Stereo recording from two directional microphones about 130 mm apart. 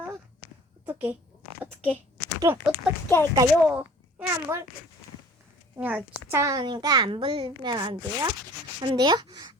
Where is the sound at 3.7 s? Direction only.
10° right (ahead or behind).